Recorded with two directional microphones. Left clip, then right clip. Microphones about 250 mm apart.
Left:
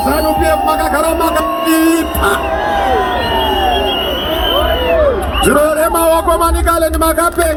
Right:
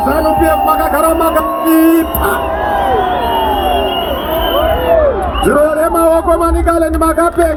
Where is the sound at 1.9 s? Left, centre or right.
Right.